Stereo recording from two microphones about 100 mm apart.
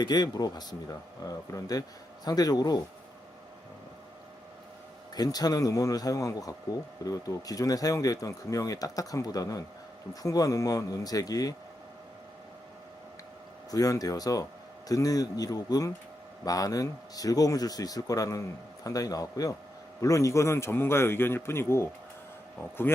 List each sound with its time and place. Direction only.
0.0 s speech: 45° left (ahead or behind)
5.1 s speech: 40° left (ahead or behind)
13.7 s a man's voice: 35° left (ahead or behind)